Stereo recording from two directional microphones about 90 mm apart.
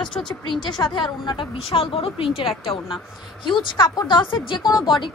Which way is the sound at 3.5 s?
65° left (ahead or behind).